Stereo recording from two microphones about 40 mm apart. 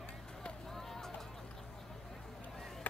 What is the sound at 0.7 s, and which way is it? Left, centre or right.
Vehicle, centre.